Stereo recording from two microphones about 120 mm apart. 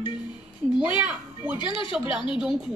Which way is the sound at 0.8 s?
10° right (ahead or behind).